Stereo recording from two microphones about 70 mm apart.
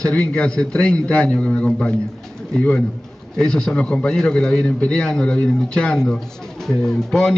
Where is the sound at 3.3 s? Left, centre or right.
Centre.